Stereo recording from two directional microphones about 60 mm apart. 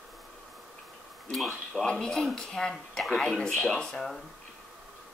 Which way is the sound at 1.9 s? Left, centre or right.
Centre.